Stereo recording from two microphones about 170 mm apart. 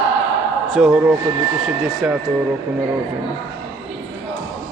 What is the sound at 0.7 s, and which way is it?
Speech, 5° right (ahead or behind).